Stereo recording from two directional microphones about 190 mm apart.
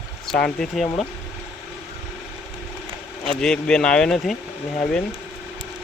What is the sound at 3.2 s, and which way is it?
Speech, 5° left (ahead or behind).